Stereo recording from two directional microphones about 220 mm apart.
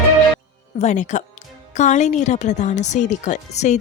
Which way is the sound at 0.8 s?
35° left (ahead or behind).